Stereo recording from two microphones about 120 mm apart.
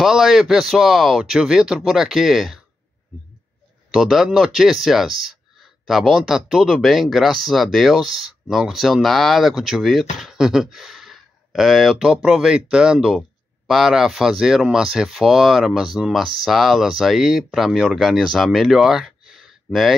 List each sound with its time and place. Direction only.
0.0 s speech: 5° right (ahead or behind)
3.9 s speech: 5° right (ahead or behind)